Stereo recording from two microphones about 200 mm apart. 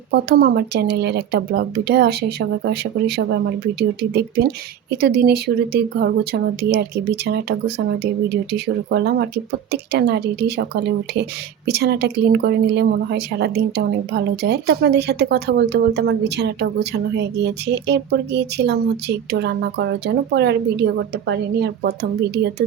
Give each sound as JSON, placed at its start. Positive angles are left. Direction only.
{"t": 0.1, "sound": "speech", "side_deg": -50}